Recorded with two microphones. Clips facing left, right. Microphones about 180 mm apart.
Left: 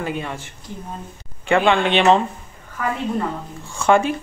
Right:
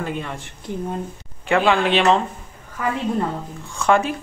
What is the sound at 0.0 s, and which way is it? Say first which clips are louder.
Speech: left 1 dB; centre (ahead or behind).